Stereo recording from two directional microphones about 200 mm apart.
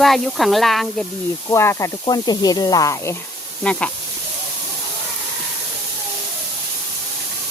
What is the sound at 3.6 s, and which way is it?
Speech, 5° left (ahead or behind).